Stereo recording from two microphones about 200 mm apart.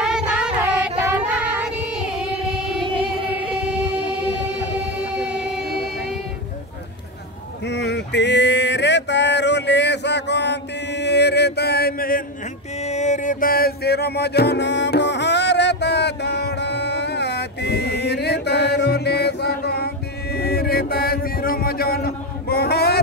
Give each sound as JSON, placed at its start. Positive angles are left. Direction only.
{"t": 0.0, "sound": "child singing", "side_deg": -5}
{"t": 3.0, "sound": "singing", "side_deg": -5}
{"t": 5.2, "sound": "a sound", "side_deg": -5}
{"t": 7.6, "sound": "male singing", "side_deg": 60}
{"t": 12.8, "sound": "music", "side_deg": 35}
{"t": 20.3, "sound": "mantra", "side_deg": 50}